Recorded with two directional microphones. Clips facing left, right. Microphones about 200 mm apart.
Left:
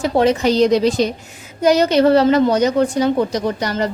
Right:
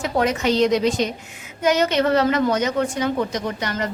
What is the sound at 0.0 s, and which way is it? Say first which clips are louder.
A woman's voice: left 6 dB; 30° left (ahead or behind).